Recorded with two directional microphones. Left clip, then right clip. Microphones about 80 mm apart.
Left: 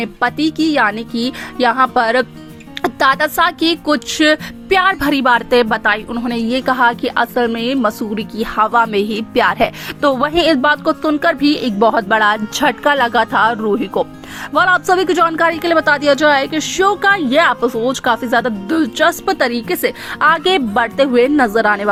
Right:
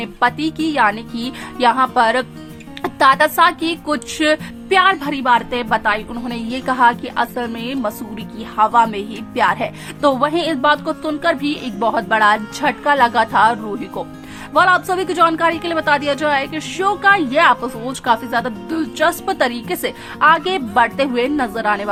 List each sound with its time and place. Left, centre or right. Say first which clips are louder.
0.0 s speech: left 1 dB; left
2.8 s speech: right 1 dB; left
6.1 s speech: left 6 dB; left
8.6 s speech: even; left
11.5 s speech: left 7 dB; centre
11.8 s speech: left 2 dB; left
14.5 s a woman's voice: left 1 dB; left
18.0 s speech: even; left
20.1 s speech: left 1 dB; left